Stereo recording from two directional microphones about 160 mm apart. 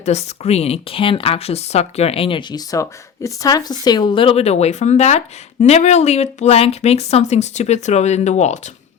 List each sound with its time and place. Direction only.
0.0 s speech: 45° left (ahead or behind)